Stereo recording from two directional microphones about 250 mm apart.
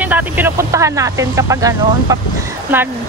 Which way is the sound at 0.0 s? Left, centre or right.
Centre.